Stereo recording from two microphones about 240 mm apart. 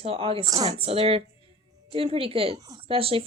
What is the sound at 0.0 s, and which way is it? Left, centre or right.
A woman's voice, right.